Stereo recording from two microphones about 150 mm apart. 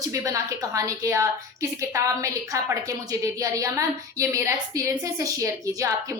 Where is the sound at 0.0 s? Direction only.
20° right (ahead or behind).